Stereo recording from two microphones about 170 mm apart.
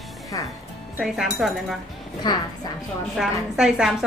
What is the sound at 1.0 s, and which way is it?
Speech, centre (ahead or behind).